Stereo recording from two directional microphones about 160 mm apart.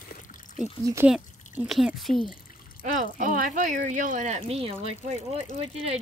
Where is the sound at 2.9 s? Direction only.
55° right (ahead or behind).